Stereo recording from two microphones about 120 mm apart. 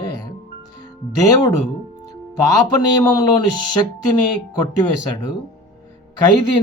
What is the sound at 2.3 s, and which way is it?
Speech, 30° left (ahead or behind).